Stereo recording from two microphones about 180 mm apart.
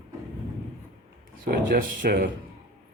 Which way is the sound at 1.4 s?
55° right (ahead or behind).